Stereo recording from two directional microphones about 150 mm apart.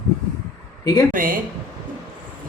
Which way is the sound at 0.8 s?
25° left (ahead or behind).